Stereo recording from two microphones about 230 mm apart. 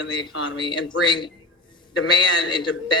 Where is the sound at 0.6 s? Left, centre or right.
Centre.